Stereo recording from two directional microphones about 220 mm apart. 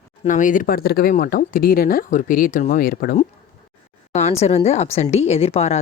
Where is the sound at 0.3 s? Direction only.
35° left (ahead or behind).